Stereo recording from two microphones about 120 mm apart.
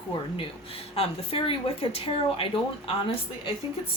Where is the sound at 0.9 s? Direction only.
50° left (ahead or behind).